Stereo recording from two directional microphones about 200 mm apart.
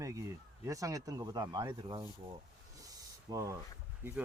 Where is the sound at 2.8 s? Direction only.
20° right (ahead or behind).